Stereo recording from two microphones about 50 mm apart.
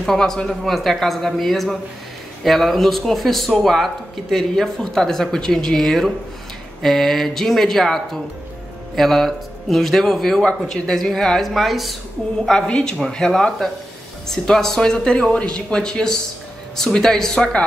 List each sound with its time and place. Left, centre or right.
0.0 s speech: centre
0.5 s speech: centre
12.6 s speech: centre